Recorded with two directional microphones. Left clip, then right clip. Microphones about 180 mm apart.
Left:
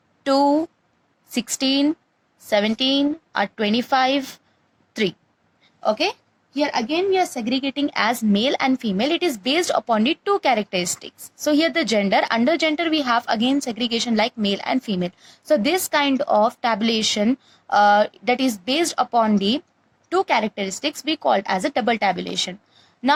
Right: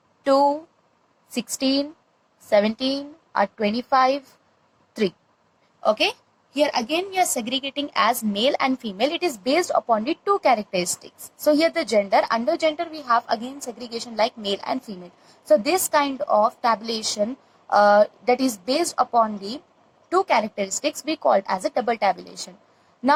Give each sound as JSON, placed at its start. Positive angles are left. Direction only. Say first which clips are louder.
{"t": 0.3, "sound": "speech", "louder": "left 3 dB", "side_deg": 30}
{"t": 2.8, "sound": "speech", "louder": "left 7 dB", "side_deg": 25}
{"t": 5.8, "sound": "speech", "louder": "even", "side_deg": 15}